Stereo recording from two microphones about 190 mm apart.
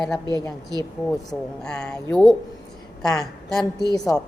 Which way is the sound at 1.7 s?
5° left (ahead or behind).